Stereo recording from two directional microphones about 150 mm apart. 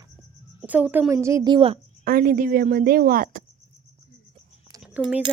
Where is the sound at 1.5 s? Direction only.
40° right (ahead or behind).